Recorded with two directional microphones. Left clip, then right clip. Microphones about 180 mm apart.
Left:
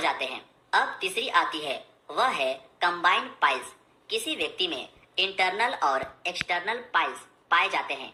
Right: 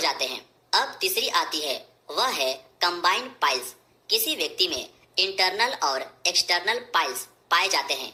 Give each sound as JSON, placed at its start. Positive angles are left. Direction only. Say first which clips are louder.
{"t": 0.0, "sound": "a woman's voice", "louder": "right 2 dB", "side_deg": -40}